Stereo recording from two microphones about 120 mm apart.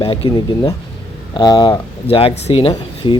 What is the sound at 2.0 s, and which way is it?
Speech, 50° left (ahead or behind).